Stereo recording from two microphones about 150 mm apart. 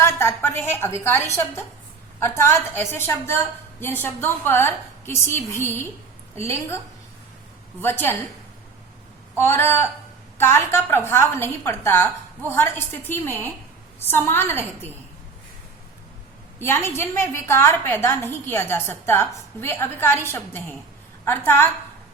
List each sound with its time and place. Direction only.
0.0 s a woman's voice: 15° left (ahead or behind)
7.8 s a woman's voice: 15° left (ahead or behind)
9.4 s a woman's voice: 15° left (ahead or behind)
16.6 s a woman's voice: 15° left (ahead or behind)